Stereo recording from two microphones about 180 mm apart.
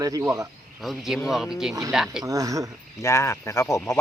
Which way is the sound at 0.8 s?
Centre (ahead or behind).